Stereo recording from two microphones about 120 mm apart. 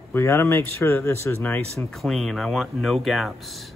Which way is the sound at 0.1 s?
20° left (ahead or behind).